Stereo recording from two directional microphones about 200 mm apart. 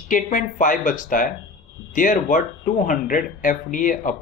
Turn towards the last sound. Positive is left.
turn(degrees=40)  # may be behind; listen again after turning